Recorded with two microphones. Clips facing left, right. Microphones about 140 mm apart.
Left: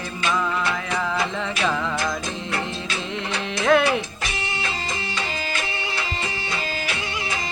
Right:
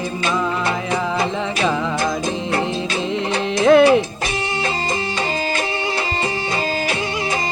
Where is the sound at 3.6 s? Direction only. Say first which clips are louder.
Right 8 dB; 35° right (ahead or behind).